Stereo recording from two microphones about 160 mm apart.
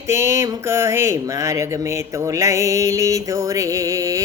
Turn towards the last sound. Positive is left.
turn(degrees=-20)  # may be behind; listen again after turning